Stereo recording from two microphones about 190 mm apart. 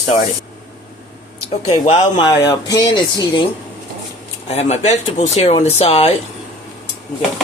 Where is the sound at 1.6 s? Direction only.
35° left (ahead or behind).